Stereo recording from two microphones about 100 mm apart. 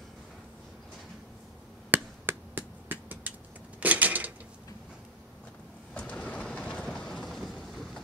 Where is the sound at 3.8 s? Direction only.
15° right (ahead or behind).